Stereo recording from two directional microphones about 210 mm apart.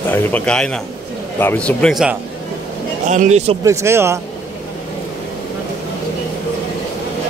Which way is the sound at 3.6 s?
15° right (ahead or behind).